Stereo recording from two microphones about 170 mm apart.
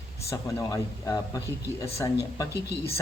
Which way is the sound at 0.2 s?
15° left (ahead or behind).